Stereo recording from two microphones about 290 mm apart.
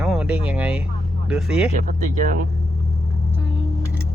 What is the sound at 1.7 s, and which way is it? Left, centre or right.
Speech, right.